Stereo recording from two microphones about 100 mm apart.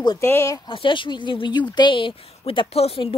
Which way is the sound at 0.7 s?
55° left (ahead or behind).